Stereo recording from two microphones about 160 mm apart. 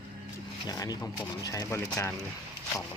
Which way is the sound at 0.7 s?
25° left (ahead or behind).